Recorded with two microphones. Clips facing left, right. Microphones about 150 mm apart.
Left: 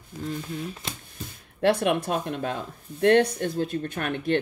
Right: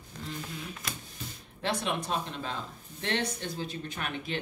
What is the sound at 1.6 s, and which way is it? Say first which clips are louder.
Speech: left 10 dB; 60° left (ahead or behind).